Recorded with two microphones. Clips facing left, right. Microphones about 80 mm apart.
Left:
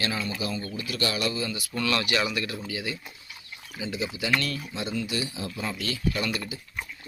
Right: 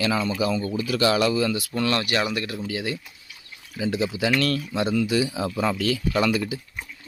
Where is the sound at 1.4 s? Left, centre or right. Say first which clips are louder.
Right 7 dB; right.